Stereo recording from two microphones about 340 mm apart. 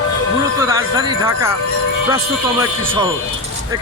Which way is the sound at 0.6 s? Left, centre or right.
Centre.